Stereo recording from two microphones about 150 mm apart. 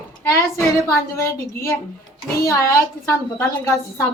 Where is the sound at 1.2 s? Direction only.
15° left (ahead or behind).